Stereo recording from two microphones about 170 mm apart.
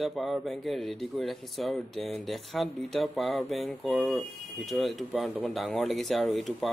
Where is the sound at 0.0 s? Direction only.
Centre (ahead or behind).